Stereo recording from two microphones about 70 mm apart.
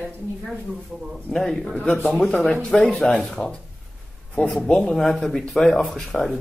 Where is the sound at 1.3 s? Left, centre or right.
Centre.